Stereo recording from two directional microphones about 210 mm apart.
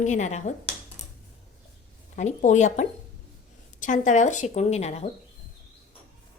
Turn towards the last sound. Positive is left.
turn(degrees=30)  # may be behind; listen again after turning